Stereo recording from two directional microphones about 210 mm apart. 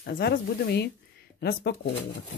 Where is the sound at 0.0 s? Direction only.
55° left (ahead or behind).